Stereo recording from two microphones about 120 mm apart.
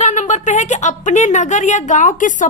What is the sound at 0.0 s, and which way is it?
A woman's voice, 80° left.